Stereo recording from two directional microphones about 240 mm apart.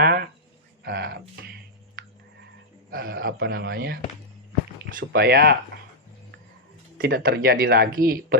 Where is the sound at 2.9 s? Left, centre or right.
Right.